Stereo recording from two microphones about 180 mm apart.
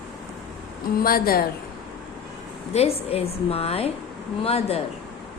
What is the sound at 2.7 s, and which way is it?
A woman's voice, 35° left (ahead or behind).